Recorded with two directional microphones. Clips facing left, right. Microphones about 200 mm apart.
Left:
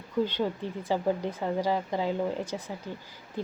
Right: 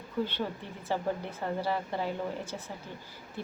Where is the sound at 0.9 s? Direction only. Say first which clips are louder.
Left 4 dB; 15° left (ahead or behind).